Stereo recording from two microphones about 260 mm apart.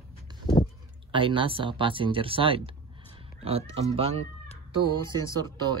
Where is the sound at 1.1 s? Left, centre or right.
Centre.